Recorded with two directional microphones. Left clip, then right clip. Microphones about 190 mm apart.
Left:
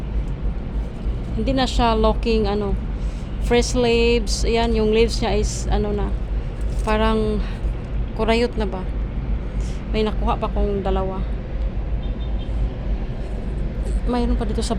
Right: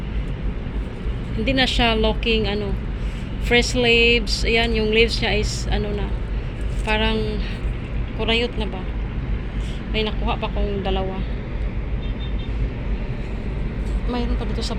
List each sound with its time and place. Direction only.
1.5 s speech: 5° left (ahead or behind)
8.4 s speech: 30° left (ahead or behind)
9.9 s speech: 20° left (ahead or behind)
14.1 s a woman's voice: 30° left (ahead or behind)